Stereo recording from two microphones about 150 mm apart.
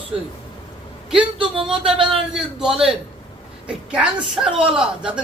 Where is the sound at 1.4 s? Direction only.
35° right (ahead or behind).